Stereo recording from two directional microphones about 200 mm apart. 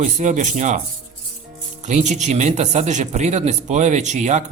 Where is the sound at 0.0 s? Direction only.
35° right (ahead or behind).